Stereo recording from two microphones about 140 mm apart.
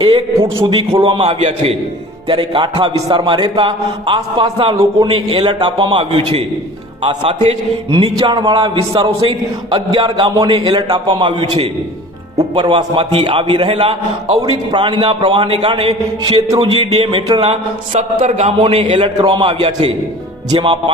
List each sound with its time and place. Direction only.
0.6 s a man's voice: 40° right (ahead or behind)
1.4 s a man's voice: 50° right (ahead or behind)
2.2 s a man's voice: 35° right (ahead or behind)
16.2 s a man's voice: 35° right (ahead or behind)
19.2 s a man's voice: 35° right (ahead or behind)
20.5 s a man's voice: 35° right (ahead or behind)